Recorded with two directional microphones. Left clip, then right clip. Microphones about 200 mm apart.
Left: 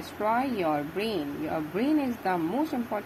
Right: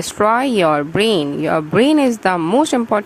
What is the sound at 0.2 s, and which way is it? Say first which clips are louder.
A woman's voice: right 13 dB; 40° right (ahead or behind).